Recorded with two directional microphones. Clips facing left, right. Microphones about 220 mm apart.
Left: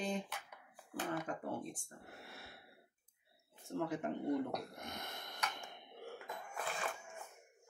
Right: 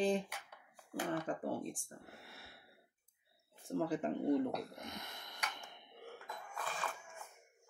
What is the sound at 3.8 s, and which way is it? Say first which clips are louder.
Speech: right 2 dB; 30° right (ahead or behind).